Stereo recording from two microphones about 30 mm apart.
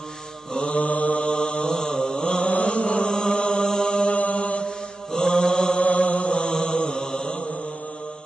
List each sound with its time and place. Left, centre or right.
0.5 s mantra: left
1.2 s mantra: left
2.2 s chant: left
2.6 s mantra: left
3.1 s chant: left
4.1 s mantra: left
4.6 s mantra: left
5.8 s chant: left
6.5 s chant: left